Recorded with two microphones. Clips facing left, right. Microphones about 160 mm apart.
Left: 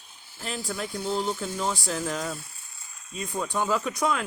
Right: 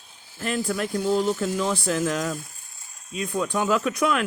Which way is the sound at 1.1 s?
90° right.